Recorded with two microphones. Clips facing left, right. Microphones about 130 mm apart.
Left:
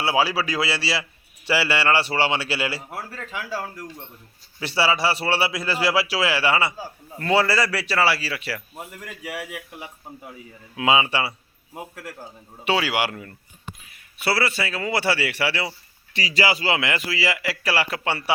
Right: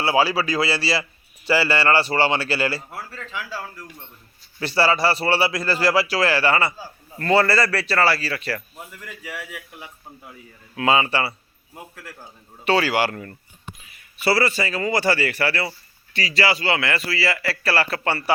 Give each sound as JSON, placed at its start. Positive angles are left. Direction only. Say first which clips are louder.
{"t": 0.0, "sound": "a man's voice", "louder": "right 2 dB", "side_deg": 10}
{"t": 2.9, "sound": "speech", "louder": "left 1 dB", "side_deg": 40}
{"t": 4.6, "sound": "a man's voice", "louder": "right 2 dB", "side_deg": 10}
{"t": 8.9, "sound": "a man's voice", "louder": "left 1 dB", "side_deg": 45}
{"t": 10.8, "sound": "a man's voice", "louder": "right 1 dB", "side_deg": 10}